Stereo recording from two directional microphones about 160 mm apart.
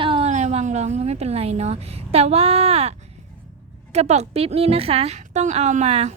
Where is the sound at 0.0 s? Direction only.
35° right (ahead or behind).